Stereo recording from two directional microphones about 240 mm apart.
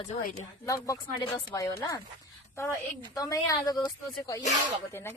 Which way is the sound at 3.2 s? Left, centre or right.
Centre.